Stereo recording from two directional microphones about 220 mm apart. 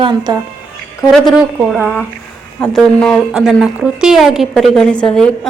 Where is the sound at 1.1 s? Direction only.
Centre (ahead or behind).